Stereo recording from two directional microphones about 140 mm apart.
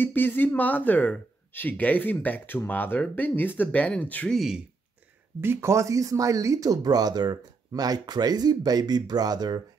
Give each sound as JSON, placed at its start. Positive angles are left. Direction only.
{"t": 0.0, "sound": "speech", "side_deg": 15}
{"t": 5.4, "sound": "speech", "side_deg": -15}